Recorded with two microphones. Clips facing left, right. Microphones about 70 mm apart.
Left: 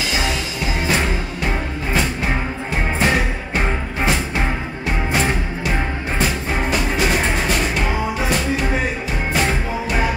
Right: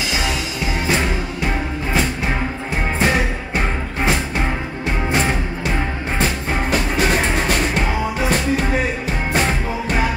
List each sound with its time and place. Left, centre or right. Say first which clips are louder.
3.0 s music: right 1 dB; right
6.1 s music: even; right